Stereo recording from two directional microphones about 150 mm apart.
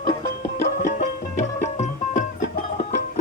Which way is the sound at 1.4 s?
50° left (ahead or behind).